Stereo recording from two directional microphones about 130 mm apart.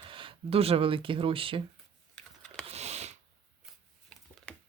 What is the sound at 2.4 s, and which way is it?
Typing, 5° left (ahead or behind).